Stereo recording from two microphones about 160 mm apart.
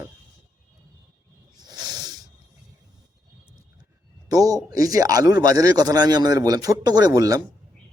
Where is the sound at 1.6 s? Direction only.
25° right (ahead or behind).